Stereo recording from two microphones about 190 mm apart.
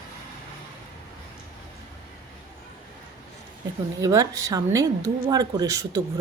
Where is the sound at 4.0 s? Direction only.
15° right (ahead or behind).